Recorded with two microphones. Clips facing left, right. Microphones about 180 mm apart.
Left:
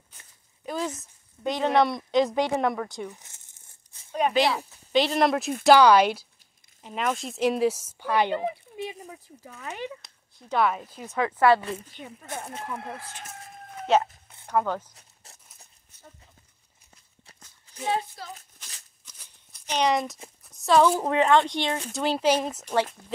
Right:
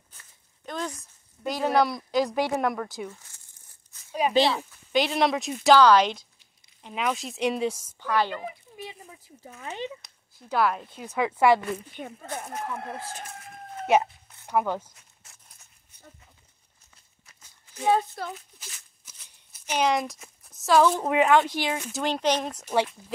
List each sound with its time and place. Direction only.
0.7 s speech: 5° left (ahead or behind)
3.1 s crumpling: 20° left (ahead or behind)
4.2 s speech: 5° right (ahead or behind)
8.0 s speech: 15° left (ahead or behind)
9.5 s speech: 30° right (ahead or behind)
10.0 s speech: centre (ahead or behind)
11.1 s speech: 10° right (ahead or behind)
12.3 s speech: 20° left (ahead or behind)
13.9 s speech: 10° right (ahead or behind)
15.2 s a sound: 35° left (ahead or behind)
17.8 s a child's voice: 50° right (ahead or behind)
19.0 s a sound: 10° right (ahead or behind)
20.4 s speech: centre (ahead or behind)
21.1 s speech: 10° right (ahead or behind)